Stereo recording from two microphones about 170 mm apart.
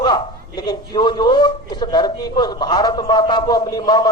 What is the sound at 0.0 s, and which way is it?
A man's voice, 25° left (ahead or behind).